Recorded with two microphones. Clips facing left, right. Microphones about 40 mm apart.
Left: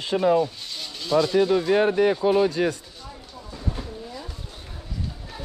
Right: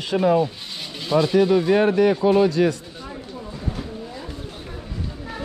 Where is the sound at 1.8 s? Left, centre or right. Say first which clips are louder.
Right 3 dB; right.